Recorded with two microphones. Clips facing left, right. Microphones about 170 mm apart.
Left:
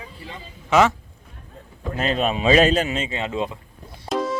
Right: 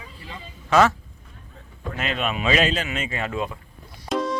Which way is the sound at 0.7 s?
15° left (ahead or behind).